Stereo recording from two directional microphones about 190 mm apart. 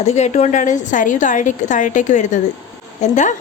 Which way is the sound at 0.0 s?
35° left (ahead or behind).